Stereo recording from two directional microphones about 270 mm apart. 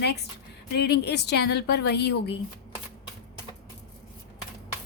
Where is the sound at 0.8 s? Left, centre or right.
Left.